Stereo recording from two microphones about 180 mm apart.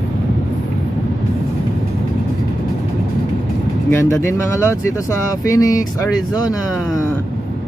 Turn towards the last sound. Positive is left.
turn(degrees=20)  # may be behind; listen again after turning